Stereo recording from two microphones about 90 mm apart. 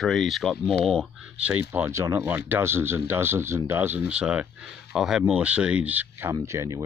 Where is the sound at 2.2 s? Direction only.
20° right (ahead or behind).